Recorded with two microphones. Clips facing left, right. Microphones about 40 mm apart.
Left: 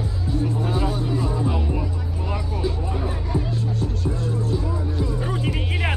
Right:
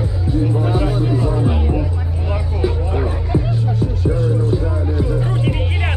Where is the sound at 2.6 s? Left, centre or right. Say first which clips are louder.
Right 8 dB; right.